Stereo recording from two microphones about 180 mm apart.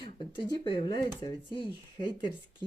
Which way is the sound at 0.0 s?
25° left (ahead or behind).